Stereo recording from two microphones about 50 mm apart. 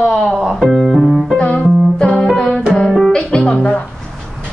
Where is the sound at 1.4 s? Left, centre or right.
Left.